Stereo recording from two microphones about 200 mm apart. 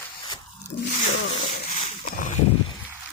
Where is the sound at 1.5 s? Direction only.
35° left (ahead or behind).